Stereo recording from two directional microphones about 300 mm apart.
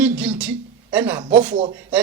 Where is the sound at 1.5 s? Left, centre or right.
Centre.